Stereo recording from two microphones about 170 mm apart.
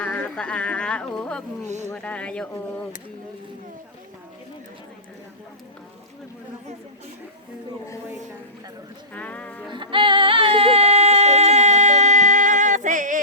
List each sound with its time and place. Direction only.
0.0 s speech: 5° left (ahead or behind)
1.6 s speech: 45° right (ahead or behind)
1.9 s speech: 10° left (ahead or behind)
9.1 s music: 5° left (ahead or behind)
9.7 s music: 30° right (ahead or behind); by 13.2 s 50° right (ahead or behind)